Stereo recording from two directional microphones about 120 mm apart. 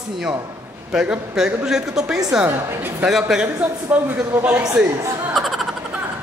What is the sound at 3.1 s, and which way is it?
A woman's voice, 5° right (ahead or behind).